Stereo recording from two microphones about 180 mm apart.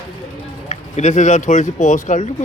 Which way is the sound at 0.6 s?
40° left (ahead or behind).